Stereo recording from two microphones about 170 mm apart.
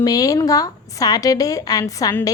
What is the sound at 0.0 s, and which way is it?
A woman's voice, 20° left (ahead or behind).